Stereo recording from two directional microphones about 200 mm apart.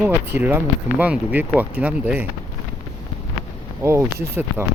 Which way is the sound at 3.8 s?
10° right (ahead or behind).